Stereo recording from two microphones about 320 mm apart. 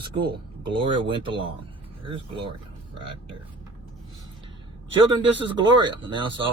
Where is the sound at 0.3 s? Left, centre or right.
Centre.